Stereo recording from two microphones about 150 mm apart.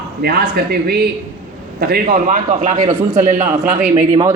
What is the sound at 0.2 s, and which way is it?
Speech, 90° right.